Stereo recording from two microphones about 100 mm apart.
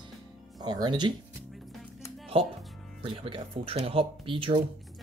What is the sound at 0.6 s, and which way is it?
Speech, 45° right (ahead or behind).